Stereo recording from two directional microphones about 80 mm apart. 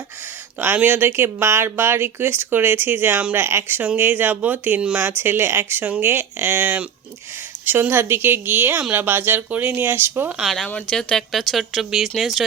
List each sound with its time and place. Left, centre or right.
0.6 s speech: right
3.3 s speech: right
5.1 s speech: right
10.3 s speech: centre
10.7 s speech: centre